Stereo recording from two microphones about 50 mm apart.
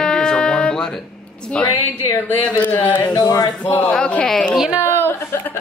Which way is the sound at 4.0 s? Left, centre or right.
Left.